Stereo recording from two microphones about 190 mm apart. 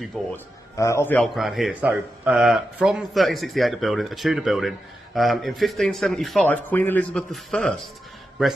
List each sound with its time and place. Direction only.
0.3 s speech: 15° left (ahead or behind); by 8.5 s centre (ahead or behind)